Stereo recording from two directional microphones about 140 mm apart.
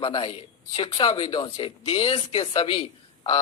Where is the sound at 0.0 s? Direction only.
40° left (ahead or behind).